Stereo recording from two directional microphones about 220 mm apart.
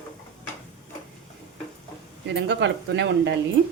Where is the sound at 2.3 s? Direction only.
50° right (ahead or behind).